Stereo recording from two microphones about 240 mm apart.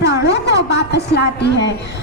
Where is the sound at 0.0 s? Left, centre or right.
Left.